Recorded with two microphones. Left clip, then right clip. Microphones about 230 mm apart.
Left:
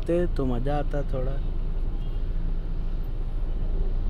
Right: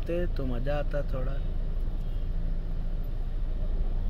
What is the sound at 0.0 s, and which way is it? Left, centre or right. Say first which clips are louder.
Speech: left 7 dB; left.